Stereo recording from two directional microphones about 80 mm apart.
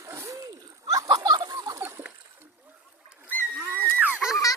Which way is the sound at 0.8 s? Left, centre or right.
Right.